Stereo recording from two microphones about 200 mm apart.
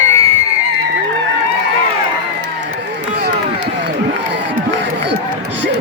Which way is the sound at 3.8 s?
60° right (ahead or behind).